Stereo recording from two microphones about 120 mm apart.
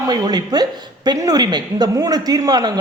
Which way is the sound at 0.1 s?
35° right (ahead or behind).